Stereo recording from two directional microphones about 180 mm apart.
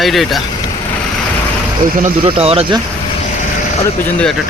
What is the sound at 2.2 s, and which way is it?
Speech, 30° right (ahead or behind).